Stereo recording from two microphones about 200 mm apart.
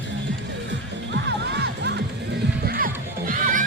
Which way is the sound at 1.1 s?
60° right (ahead or behind).